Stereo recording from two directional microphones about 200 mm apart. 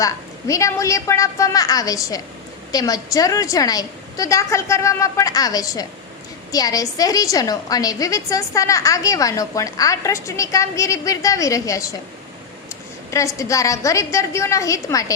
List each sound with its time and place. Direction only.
0.0 s a woman's voice: 15° left (ahead or behind)
13.1 s a woman's voice: 15° left (ahead or behind)